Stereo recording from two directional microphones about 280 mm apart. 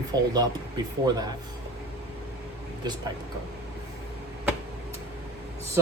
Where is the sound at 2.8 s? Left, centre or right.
Centre.